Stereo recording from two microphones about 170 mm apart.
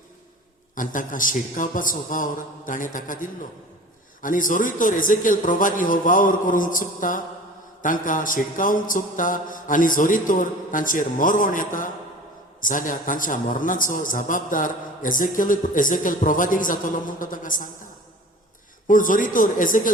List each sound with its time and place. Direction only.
0.8 s a man's voice: 50° left (ahead or behind)
18.9 s a man's voice: 50° left (ahead or behind)